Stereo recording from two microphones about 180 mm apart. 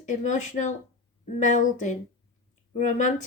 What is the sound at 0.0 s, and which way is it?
Speech, 40° left (ahead or behind).